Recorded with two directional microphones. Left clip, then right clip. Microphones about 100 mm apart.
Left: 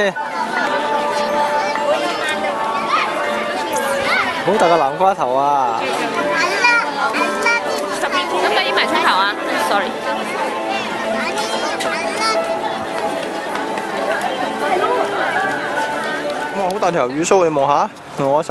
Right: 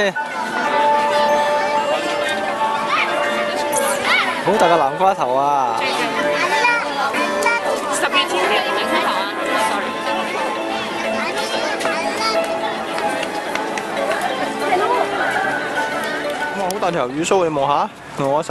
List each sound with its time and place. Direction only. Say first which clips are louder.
4.6 s speech: left 1 dB; 5° right (ahead or behind)
6.6 s chatter: left 2 dB; 35° left (ahead or behind)
8.9 s music: left 4 dB; 20° left (ahead or behind)
16.8 s speech: left 3 dB; centre (ahead or behind)